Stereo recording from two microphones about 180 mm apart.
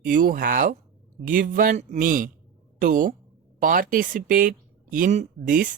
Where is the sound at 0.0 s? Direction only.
50° right (ahead or behind).